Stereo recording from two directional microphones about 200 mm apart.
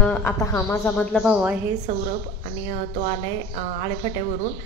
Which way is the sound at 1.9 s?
35° right (ahead or behind).